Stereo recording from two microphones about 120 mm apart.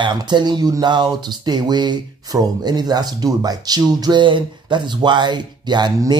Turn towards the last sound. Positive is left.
turn(degrees=-35)  # may be behind; listen again after turning